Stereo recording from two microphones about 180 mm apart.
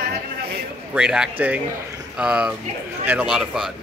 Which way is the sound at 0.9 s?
5° right (ahead or behind).